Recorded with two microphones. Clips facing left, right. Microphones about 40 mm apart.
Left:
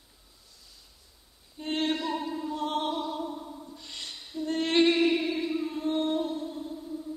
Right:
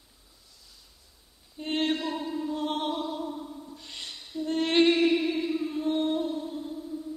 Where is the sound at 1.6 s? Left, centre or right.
Centre.